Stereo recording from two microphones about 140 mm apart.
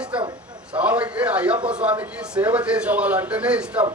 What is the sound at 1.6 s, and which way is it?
A man's voice, 10° right (ahead or behind).